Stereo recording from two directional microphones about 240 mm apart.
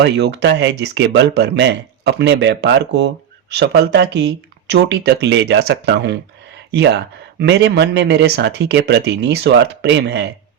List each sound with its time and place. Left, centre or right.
0.0 s speech: right